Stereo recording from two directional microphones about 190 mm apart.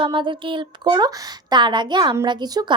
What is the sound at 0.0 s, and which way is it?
Speech, 25° right (ahead or behind).